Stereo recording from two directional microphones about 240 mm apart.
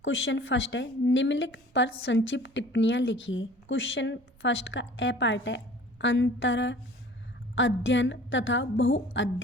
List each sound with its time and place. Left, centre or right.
0.0 s a woman's voice: left